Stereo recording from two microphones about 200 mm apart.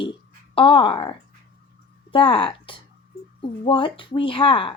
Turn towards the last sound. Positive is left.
turn(degrees=25)  # may be behind; listen again after turning